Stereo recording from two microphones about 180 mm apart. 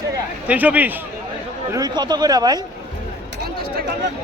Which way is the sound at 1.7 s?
20° right (ahead or behind).